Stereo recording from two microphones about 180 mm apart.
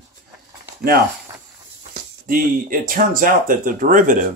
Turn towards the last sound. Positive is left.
turn(degrees=-50)  # may be behind; listen again after turning